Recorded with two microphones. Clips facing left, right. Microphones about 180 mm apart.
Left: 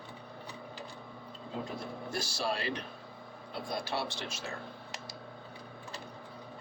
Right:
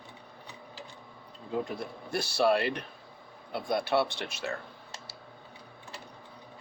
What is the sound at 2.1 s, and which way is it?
Speech, 60° right (ahead or behind).